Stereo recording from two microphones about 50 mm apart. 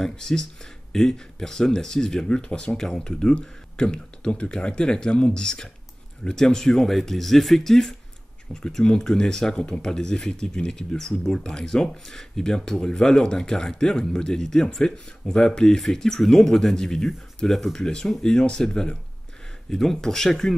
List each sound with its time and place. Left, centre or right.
0.0 s speech: centre